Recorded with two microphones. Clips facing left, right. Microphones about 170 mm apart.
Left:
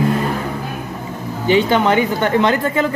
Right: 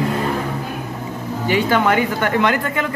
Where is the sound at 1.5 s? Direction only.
25° left (ahead or behind).